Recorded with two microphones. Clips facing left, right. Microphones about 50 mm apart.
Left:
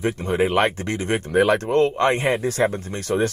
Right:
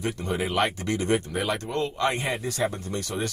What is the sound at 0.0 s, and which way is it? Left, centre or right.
Speech, left.